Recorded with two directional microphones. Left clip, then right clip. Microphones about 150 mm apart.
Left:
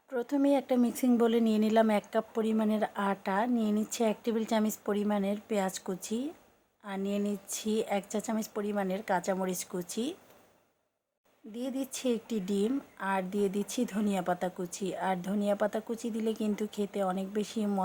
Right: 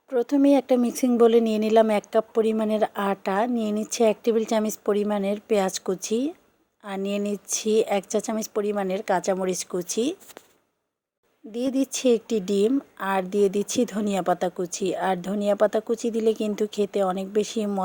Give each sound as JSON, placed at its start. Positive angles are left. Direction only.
{"t": 0.1, "sound": "speech", "side_deg": -40}
{"t": 11.5, "sound": "speech", "side_deg": -50}